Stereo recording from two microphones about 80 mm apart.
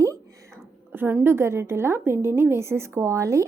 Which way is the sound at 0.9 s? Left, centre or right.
Right.